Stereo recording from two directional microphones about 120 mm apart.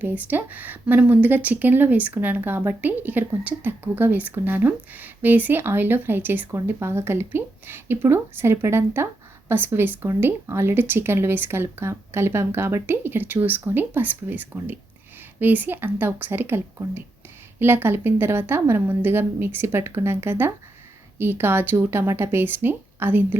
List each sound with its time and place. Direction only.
0.0 s speech: 15° right (ahead or behind)